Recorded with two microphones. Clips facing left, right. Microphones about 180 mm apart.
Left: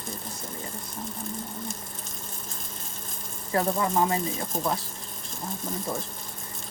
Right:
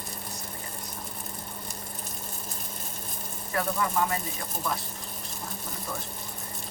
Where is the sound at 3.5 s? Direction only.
30° left (ahead or behind).